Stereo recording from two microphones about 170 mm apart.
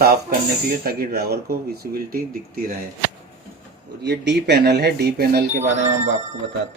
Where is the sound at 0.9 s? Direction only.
65° right (ahead or behind).